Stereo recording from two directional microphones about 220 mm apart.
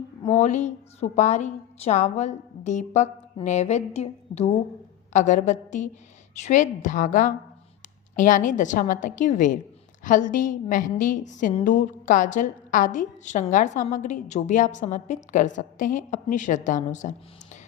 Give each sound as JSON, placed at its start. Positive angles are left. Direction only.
{"t": 0.3, "sound": "a woman's voice", "side_deg": 35}